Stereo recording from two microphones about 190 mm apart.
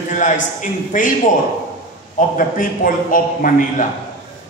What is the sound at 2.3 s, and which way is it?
A man's voice, 45° left (ahead or behind).